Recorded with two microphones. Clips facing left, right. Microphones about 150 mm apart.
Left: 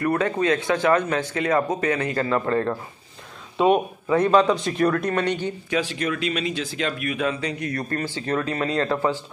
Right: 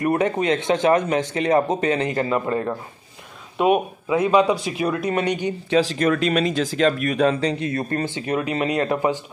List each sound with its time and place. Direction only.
0.0 s speech: 20° right (ahead or behind)
5.7 s speech: 35° right (ahead or behind); by 9.2 s 15° right (ahead or behind)